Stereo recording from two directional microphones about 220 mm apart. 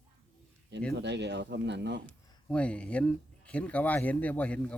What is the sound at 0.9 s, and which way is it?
Speech, 50° right (ahead or behind).